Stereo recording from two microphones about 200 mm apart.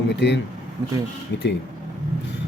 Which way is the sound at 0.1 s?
60° left (ahead or behind).